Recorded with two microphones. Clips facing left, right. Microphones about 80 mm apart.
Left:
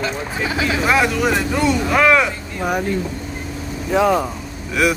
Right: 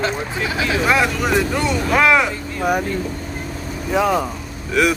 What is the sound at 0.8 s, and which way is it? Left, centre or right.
Speech, centre.